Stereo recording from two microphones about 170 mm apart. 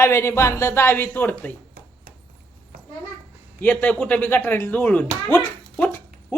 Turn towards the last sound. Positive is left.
turn(degrees=10)  # may be behind; listen again after turning